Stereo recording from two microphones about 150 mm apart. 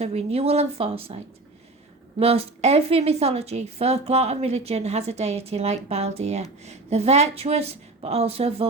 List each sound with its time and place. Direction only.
0.0 s a woman's voice: 45° right (ahead or behind)